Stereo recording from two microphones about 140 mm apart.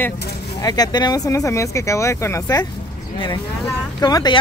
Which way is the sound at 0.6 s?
30° left (ahead or behind).